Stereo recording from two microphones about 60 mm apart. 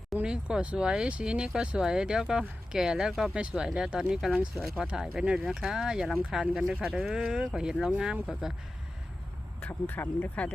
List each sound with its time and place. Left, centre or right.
0.3 s speech: centre
9.6 s speech: left